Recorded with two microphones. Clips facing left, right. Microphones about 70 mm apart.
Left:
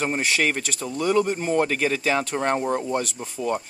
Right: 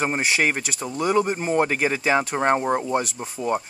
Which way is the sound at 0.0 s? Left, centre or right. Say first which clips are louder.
Right 1 dB; centre.